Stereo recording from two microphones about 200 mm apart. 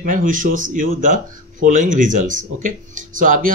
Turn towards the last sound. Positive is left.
turn(degrees=-40)  # may be behind; listen again after turning